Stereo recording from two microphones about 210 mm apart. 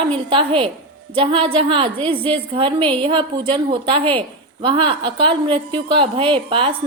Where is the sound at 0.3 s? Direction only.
25° right (ahead or behind).